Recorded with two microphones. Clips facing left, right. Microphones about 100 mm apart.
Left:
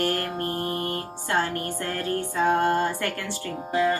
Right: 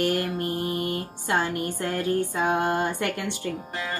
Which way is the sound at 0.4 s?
45° left (ahead or behind).